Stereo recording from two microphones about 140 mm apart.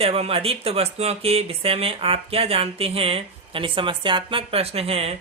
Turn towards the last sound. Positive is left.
turn(degrees=-45)  # may be behind; listen again after turning